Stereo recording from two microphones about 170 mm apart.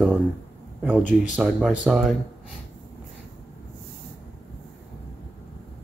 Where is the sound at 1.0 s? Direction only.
50° left (ahead or behind).